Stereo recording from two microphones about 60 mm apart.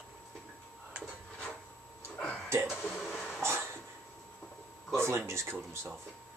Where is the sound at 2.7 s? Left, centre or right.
Centre.